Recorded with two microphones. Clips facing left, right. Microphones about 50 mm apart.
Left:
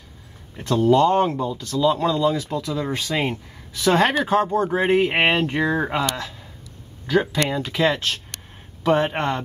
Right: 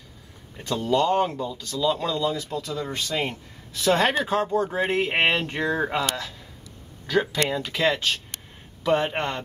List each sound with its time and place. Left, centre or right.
0.6 s speech: centre
0.8 s speech: left
1.8 s speech: centre
4.2 s speech: centre
5.5 s speech: centre
7.4 s speech: centre
8.8 s speech: left